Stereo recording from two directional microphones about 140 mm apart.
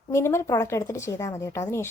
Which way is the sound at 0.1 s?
20° left (ahead or behind).